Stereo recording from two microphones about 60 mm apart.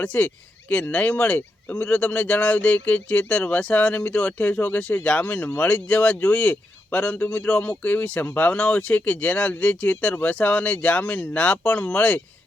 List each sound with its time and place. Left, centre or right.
0.0 s speech: left